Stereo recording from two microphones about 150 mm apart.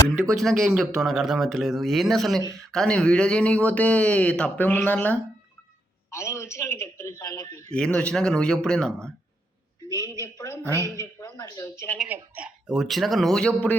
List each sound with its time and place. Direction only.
0.3 s a man's voice: centre (ahead or behind); by 7.6 s 20° left (ahead or behind)
7.9 s speech: 5° left (ahead or behind)
9.9 s a man's voice: 25° left (ahead or behind)
10.5 s a woman's voice: 20° right (ahead or behind)
10.9 s a man's voice: 25° left (ahead or behind)
12.0 s speech: 15° right (ahead or behind); by 13.7 s 10° left (ahead or behind)